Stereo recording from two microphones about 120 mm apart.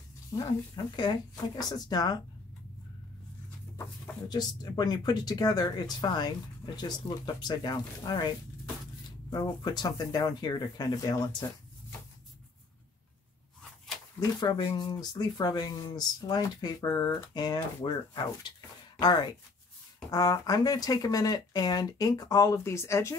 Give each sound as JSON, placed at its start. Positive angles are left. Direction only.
{"t": 0.4, "sound": "speech", "side_deg": 40}
{"t": 3.7, "sound": "speech", "side_deg": 30}
{"t": 9.3, "sound": "speech", "side_deg": 35}
{"t": 14.4, "sound": "speech", "side_deg": 40}